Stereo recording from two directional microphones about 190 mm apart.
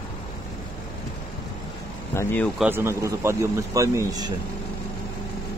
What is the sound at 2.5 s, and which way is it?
Speech, 10° right (ahead or behind).